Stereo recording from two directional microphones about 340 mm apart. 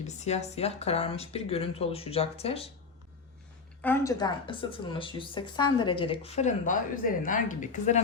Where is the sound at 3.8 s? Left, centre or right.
Centre.